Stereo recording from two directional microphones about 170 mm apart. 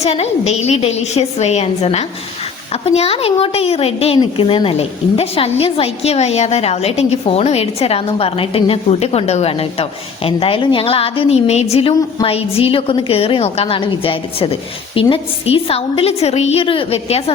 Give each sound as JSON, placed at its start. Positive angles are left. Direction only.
{"t": 0.0, "sound": "a woman's voice", "side_deg": 40}